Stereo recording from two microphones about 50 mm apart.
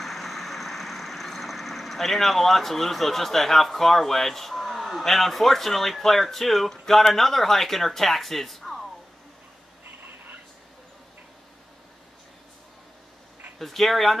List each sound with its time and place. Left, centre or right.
0.0 s vehicle: centre
9.8 s a sound: right
13.6 s speech: centre